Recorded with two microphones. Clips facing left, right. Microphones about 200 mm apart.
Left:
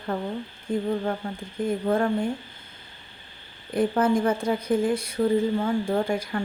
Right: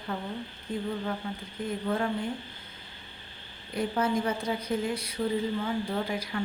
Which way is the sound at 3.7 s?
50° left (ahead or behind).